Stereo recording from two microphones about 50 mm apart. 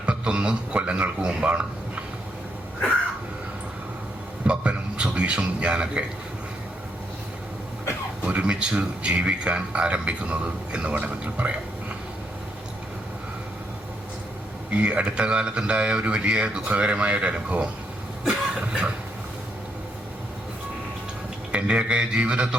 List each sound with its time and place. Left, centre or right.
0.0 s speech: right
4.4 s a man's voice: right
8.2 s speech: right
14.7 s speech: right
21.5 s speech: right